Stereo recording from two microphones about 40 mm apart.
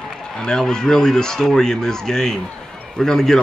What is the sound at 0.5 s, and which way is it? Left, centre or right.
A man's voice, centre.